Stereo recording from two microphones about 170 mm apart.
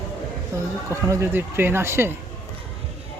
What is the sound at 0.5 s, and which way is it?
Speech, 15° right (ahead or behind).